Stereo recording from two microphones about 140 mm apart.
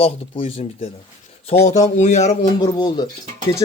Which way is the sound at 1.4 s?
50° left (ahead or behind).